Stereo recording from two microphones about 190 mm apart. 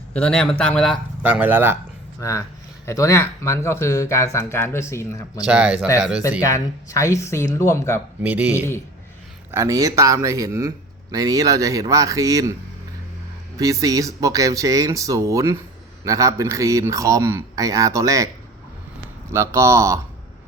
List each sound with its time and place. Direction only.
0.1 s speech: 5° left (ahead or behind)
1.2 s speech: 10° right (ahead or behind)
2.8 s speech: 15° left (ahead or behind)
5.5 s speech: 5° right (ahead or behind)
6.4 s speech: 15° left (ahead or behind)
8.2 s speech: 10° right (ahead or behind)
13.6 s speech: 15° right (ahead or behind)
19.3 s speech: 15° right (ahead or behind)